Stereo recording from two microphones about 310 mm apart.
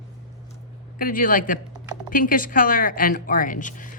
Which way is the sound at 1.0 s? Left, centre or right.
Left.